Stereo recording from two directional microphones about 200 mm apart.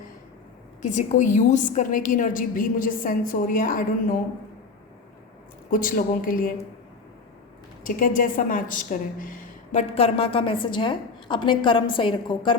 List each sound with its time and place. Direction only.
0.8 s a woman's voice: 40° left (ahead or behind)
5.7 s a woman's voice: 45° left (ahead or behind)
7.9 s a woman's voice: 45° left (ahead or behind); by 12.5 s 25° left (ahead or behind)